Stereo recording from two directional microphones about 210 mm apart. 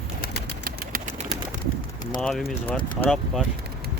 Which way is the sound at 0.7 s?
45° right (ahead or behind).